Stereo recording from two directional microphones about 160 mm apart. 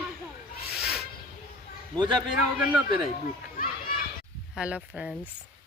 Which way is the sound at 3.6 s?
60° left (ahead or behind).